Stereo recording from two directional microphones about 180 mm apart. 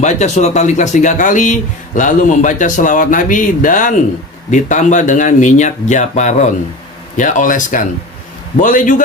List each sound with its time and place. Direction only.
0.0 s speech: 40° left (ahead or behind)